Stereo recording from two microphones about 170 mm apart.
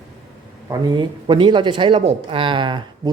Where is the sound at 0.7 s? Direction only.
30° right (ahead or behind).